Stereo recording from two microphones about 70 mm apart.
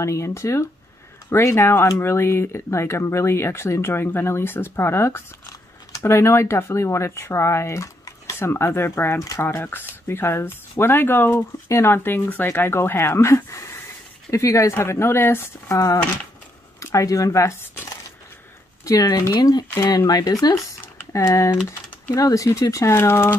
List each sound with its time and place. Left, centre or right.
0.0 s speech: left
5.5 s speech: left
14.8 s speech: left
15.7 s speech: left
18.9 s speech: left
21.1 s speech: left
22.1 s speech: left
22.9 s speech: left